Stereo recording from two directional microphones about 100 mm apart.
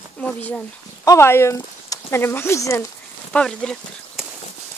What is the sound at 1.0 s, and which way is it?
Speech, 25° left (ahead or behind).